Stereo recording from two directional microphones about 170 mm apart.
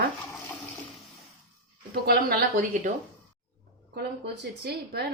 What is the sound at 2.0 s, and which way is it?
Speech, 60° right (ahead or behind).